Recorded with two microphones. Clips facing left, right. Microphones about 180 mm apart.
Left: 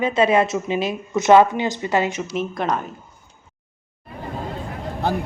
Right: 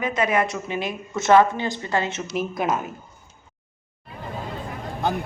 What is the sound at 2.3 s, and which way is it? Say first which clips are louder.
Speech: left 1 dB; 5° right (ahead or behind).